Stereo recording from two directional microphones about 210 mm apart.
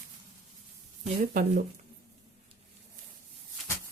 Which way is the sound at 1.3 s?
40° right (ahead or behind).